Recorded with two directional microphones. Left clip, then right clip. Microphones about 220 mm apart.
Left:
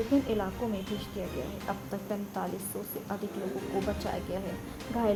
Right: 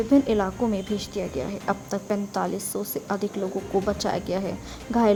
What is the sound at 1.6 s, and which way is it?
Speech, 45° right (ahead or behind).